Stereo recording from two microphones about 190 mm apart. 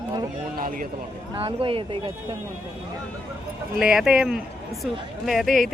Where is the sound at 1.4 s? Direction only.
30° right (ahead or behind).